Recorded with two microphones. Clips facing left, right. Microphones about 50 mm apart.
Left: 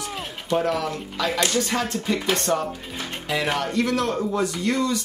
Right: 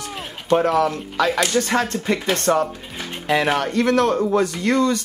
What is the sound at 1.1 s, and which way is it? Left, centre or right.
Speech, right.